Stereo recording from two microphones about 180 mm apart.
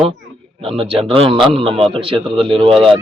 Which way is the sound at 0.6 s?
30° right (ahead or behind).